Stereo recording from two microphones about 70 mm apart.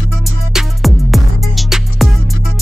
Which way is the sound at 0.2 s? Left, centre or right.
Centre.